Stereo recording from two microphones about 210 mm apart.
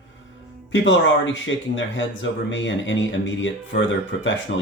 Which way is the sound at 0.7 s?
60° left (ahead or behind).